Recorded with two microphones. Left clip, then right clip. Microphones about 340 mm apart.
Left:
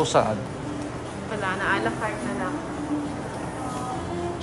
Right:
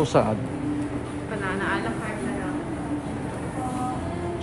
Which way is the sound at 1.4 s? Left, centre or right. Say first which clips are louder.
Left 3 dB; left.